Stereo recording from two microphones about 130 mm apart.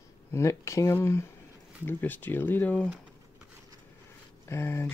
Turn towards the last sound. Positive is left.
turn(degrees=20)  # may be behind; listen again after turning